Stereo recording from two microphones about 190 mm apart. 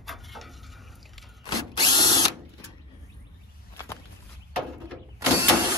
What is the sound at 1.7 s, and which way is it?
Drill, 20° left (ahead or behind).